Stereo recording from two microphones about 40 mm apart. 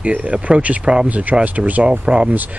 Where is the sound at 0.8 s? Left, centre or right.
Right.